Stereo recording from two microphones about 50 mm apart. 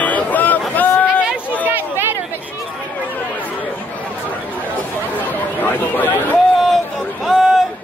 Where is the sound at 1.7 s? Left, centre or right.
Right.